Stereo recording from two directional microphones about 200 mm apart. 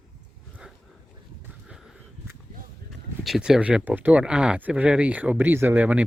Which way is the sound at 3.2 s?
Centre (ahead or behind).